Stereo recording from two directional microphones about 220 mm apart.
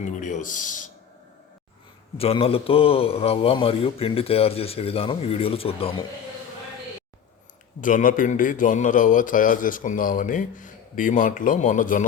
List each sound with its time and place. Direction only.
0.0 s a man's voice: 35° left (ahead or behind)
2.1 s a man's voice: 25° left (ahead or behind)
7.8 s a man's voice: 35° left (ahead or behind)